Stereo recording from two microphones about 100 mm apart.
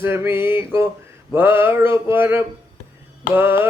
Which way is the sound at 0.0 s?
25° right (ahead or behind).